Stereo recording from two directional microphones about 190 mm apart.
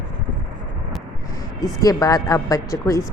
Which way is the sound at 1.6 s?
20° left (ahead or behind).